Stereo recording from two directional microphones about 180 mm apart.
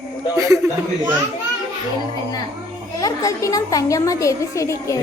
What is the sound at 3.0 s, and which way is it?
A woman's voice, 20° left (ahead or behind).